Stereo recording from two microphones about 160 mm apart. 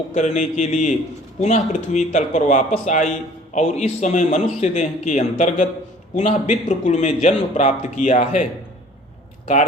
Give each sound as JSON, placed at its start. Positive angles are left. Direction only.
{"t": 0.1, "sound": "speech", "side_deg": 45}